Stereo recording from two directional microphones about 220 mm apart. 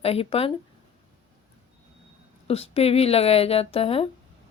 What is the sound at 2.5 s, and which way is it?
Speech, 30° left (ahead or behind).